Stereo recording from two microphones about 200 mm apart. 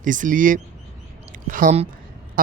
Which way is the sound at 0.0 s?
40° right (ahead or behind).